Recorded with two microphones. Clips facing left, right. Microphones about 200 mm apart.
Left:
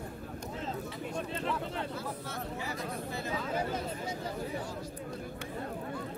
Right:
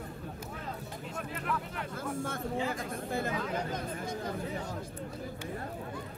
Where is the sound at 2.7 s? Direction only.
55° right (ahead or behind).